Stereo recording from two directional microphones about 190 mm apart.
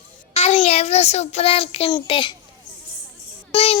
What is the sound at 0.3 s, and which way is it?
A child's voice, 30° left (ahead or behind).